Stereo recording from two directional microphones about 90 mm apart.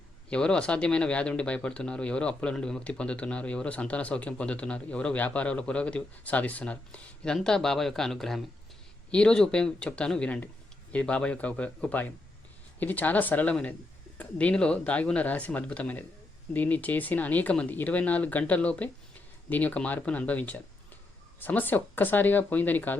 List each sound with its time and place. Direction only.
0.3 s speech: 10° left (ahead or behind)